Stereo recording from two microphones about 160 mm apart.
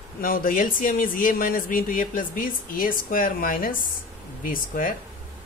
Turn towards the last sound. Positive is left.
turn(degrees=55)  # may be behind; listen again after turning